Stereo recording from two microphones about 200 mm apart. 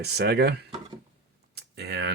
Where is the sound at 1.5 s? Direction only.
55° right (ahead or behind).